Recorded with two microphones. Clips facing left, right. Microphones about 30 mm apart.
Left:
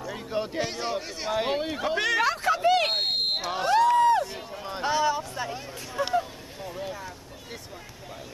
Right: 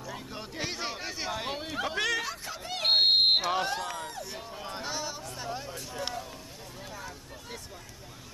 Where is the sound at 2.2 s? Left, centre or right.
Left.